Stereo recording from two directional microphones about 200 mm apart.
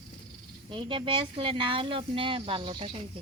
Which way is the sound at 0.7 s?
25° right (ahead or behind).